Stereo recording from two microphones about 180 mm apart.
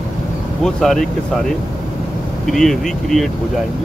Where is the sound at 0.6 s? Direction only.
Centre (ahead or behind).